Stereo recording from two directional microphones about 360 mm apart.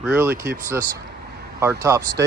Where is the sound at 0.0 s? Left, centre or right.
Centre.